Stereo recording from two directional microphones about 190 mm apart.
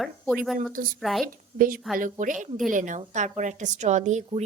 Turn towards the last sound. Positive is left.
turn(degrees=-40)  # may be behind; listen again after turning